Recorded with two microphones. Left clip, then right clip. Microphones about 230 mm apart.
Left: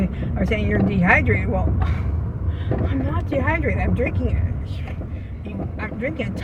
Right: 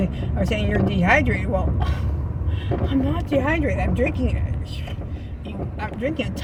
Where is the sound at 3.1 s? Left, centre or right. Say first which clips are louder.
Left 1 dB; right.